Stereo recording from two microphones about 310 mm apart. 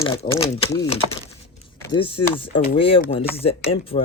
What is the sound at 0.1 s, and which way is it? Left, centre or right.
Speech, centre.